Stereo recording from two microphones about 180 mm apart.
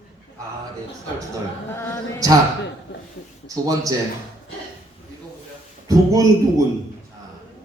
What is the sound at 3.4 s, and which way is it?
Speech, 20° right (ahead or behind).